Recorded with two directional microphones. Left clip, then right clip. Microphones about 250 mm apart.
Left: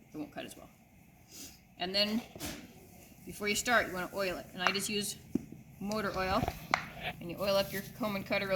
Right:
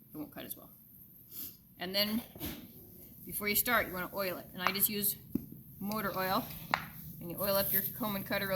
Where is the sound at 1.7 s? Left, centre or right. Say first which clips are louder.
Left 2 dB; centre.